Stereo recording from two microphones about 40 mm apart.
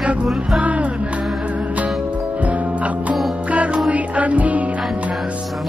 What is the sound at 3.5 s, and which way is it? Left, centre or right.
Music, right.